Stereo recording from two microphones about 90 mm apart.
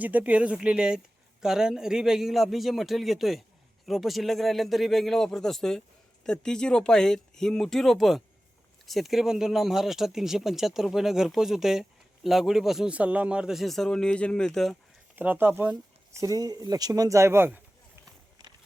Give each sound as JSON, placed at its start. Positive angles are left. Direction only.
{"t": 0.0, "sound": "speech", "side_deg": -15}
{"t": 12.9, "sound": "speech", "side_deg": -15}
{"t": 15.1, "sound": "speech", "side_deg": -20}
{"t": 16.1, "sound": "speech", "side_deg": -40}